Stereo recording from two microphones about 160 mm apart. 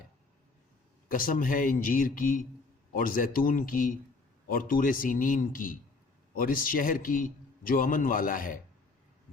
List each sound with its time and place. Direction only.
1.0 s a man's voice: 60° left (ahead or behind)